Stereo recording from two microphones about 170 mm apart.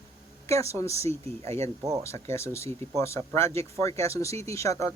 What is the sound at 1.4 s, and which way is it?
Speech, 40° right (ahead or behind).